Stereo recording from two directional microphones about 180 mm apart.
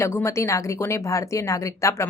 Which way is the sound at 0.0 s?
15° left (ahead or behind).